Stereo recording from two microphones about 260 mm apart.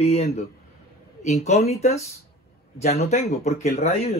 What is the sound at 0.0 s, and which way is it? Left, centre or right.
Speech, left.